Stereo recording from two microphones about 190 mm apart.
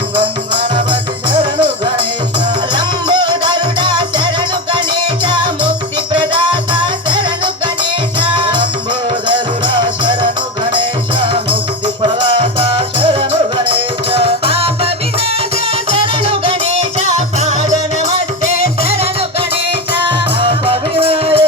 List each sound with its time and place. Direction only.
0.5 s music: 25° right (ahead or behind)
2.7 s music: 25° right (ahead or behind)
6.1 s music: 25° right (ahead or behind)
12.0 s music: 25° right (ahead or behind)
15.9 s music: 30° right (ahead or behind)